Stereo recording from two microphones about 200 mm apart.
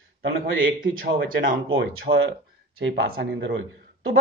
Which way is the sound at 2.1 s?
35° right (ahead or behind).